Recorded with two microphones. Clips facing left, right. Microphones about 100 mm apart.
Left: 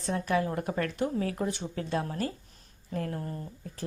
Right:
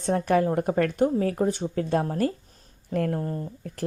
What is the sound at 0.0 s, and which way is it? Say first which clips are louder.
Speech: right 6 dB; 45° right (ahead or behind).